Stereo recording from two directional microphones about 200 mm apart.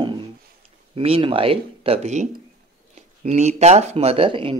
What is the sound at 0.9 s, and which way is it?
Speech, 25° right (ahead or behind).